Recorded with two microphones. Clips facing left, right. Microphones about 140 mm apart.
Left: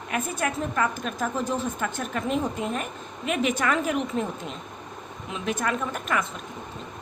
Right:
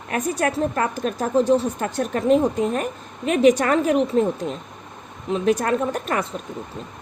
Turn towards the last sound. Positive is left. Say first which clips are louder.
# right 5 dB
turn(degrees=-35)  # may be behind; listen again after turning